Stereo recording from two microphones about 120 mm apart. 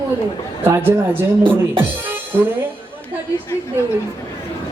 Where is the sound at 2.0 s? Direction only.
15° right (ahead or behind).